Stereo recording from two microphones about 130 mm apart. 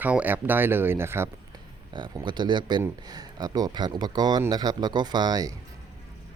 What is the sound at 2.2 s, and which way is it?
Speech, 35° right (ahead or behind).